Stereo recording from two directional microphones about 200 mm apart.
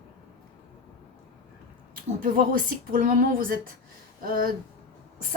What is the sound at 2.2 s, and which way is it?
A woman's voice, 40° right (ahead or behind).